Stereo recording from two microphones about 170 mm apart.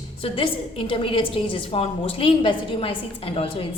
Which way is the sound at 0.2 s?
30° left (ahead or behind).